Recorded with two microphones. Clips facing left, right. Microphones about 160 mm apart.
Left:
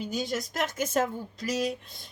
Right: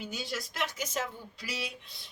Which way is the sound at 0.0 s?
45° left (ahead or behind).